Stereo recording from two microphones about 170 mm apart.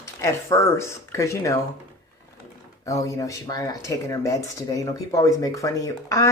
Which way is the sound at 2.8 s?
20° left (ahead or behind).